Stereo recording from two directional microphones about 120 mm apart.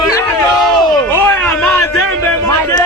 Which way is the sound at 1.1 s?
15° left (ahead or behind).